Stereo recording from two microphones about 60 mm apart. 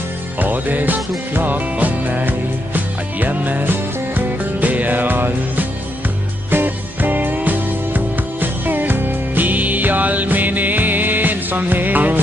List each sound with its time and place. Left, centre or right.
0.4 s music: right